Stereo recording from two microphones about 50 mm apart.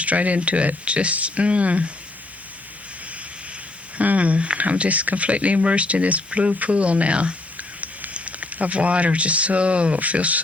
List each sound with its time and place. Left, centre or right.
0.0 s speech: right
3.9 s speech: right